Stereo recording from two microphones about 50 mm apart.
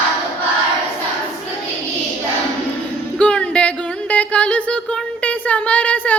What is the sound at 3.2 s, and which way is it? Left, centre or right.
Music, left.